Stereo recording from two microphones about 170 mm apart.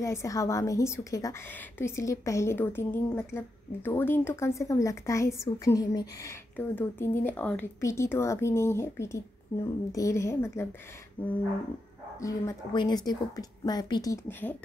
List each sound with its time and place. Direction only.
0.0 s a woman's voice: 20° left (ahead or behind)